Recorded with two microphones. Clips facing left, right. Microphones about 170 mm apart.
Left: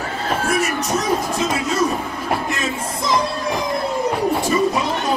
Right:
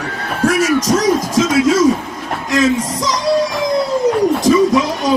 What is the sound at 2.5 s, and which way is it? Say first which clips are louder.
Speech: right 10 dB; 90° right.